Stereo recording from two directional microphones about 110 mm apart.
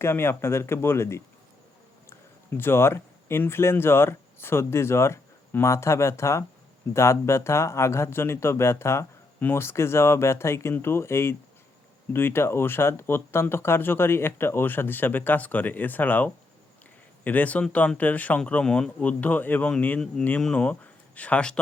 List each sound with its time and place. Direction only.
0.0 s speech: 20° left (ahead or behind)